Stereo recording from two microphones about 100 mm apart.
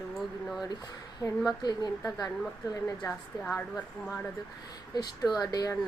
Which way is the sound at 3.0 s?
10° left (ahead or behind).